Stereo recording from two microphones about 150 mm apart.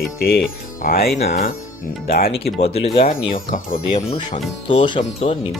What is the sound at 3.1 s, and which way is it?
Speech, 65° left (ahead or behind).